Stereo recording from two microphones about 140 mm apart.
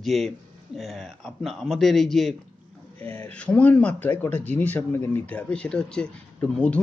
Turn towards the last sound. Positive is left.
turn(degrees=5)  # may be behind; listen again after turning